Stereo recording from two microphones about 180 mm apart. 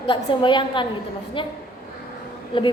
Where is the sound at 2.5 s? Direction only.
30° left (ahead or behind).